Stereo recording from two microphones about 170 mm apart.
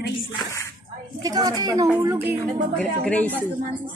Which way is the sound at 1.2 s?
25° right (ahead or behind).